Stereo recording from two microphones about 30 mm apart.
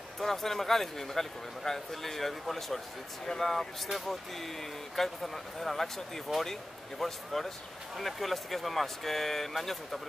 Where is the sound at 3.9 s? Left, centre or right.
Centre.